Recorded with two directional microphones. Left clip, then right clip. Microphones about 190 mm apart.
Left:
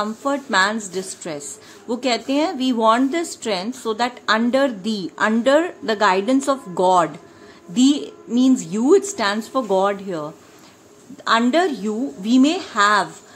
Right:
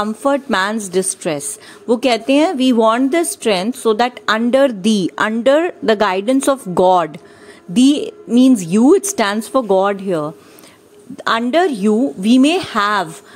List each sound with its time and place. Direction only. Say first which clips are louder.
0.0 s a woman's voice: right 6 dB; 40° right (ahead or behind)